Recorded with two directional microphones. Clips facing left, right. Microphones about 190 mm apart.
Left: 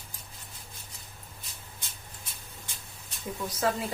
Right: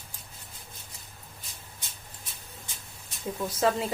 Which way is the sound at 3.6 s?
25° right (ahead or behind).